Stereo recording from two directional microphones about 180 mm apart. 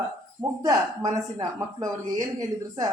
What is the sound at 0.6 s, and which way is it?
Speech, 20° right (ahead or behind).